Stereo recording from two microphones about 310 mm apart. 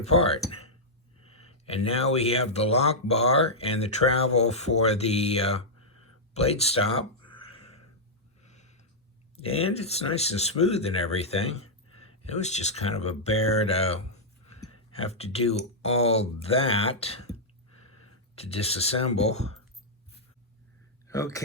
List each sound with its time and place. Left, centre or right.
0.0 s speech: centre
1.6 s speech: centre
6.3 s a sound: centre
9.7 s speech: centre
11.4 s a sound: left
12.3 s speech: left
18.3 s speech: centre
21.1 s speech: centre